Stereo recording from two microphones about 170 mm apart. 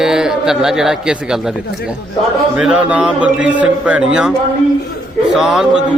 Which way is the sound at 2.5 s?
5° right (ahead or behind).